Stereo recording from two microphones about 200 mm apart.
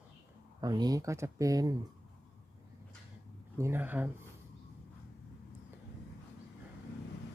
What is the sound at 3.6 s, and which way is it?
Speech, 10° right (ahead or behind).